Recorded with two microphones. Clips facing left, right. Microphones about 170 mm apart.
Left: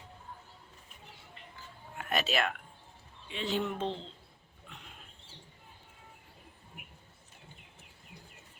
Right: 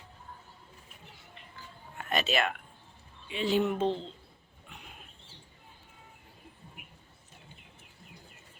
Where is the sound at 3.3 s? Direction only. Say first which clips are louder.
Right 6 dB; 10° right (ahead or behind).